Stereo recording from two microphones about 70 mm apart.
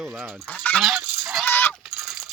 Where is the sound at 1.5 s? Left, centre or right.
Left.